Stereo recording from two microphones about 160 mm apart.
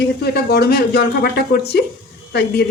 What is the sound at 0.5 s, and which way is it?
A woman's voice, 85° left.